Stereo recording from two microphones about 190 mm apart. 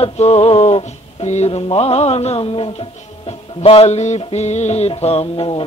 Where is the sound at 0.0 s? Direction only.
35° left (ahead or behind).